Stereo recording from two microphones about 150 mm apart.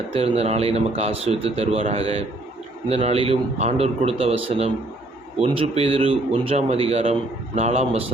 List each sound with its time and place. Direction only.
0.1 s speech: 45° right (ahead or behind)